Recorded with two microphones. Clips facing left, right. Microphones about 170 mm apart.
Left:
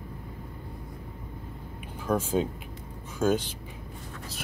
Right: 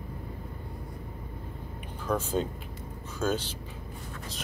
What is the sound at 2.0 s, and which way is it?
Speech, 10° left (ahead or behind).